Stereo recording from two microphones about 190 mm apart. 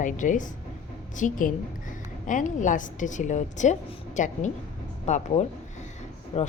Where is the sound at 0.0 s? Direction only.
40° left (ahead or behind).